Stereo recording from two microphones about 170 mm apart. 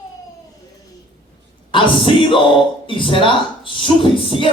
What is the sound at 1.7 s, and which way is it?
A man's voice, 30° left (ahead or behind).